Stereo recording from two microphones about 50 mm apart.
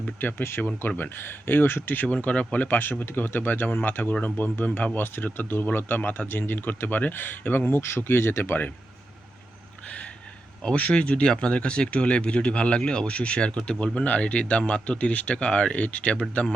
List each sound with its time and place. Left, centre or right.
0.2 s speech: left
2.1 s speech: left
3.1 s speech: left
4.9 s speech: left
7.8 s speech: left
9.8 s a sound: left
10.6 s speech: centre